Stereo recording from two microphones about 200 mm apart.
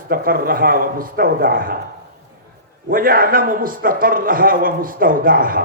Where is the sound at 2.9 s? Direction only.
45° right (ahead or behind).